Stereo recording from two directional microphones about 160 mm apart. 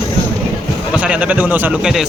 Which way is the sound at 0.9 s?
10° right (ahead or behind).